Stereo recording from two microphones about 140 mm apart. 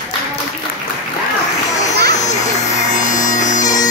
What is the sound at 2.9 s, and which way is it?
Bagpipes, 65° left (ahead or behind).